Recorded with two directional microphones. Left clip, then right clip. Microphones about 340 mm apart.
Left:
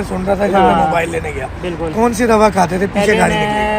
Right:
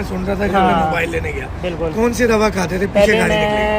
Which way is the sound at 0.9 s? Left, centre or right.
Centre.